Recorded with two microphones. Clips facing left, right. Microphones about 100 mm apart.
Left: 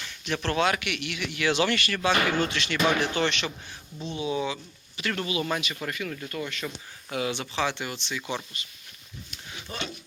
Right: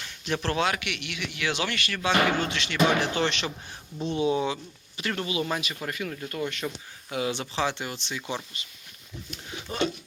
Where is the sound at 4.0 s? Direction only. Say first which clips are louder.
Right 4 dB; 45° right (ahead or behind).